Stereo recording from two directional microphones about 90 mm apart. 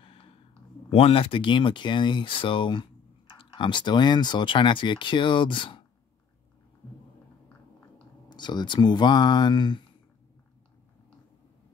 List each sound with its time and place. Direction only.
0.8 s speech: 90° left; by 5.9 s 65° left (ahead or behind)
8.3 s speech: 55° left (ahead or behind)